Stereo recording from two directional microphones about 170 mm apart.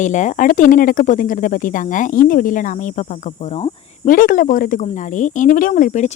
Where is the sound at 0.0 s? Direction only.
45° left (ahead or behind).